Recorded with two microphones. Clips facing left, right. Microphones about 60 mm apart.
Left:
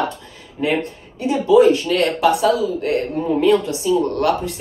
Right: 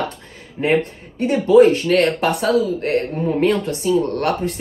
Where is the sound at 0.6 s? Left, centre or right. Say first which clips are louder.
Right 2 dB; right.